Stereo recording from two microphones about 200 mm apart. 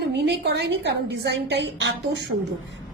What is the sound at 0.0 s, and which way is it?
A woman's voice, 55° right (ahead or behind).